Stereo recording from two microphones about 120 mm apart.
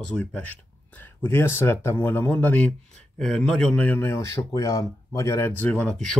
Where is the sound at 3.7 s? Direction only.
15° left (ahead or behind).